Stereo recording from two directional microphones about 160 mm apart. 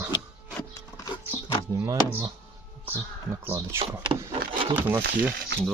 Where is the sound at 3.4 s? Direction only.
15° right (ahead or behind).